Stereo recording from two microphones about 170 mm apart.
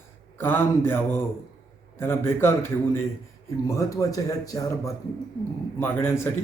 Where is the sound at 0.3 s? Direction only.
10° left (ahead or behind).